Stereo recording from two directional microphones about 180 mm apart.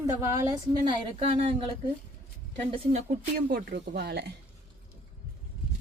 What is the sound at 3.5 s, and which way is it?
Speech, 65° right (ahead or behind).